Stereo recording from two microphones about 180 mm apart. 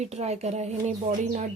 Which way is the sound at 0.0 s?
40° right (ahead or behind).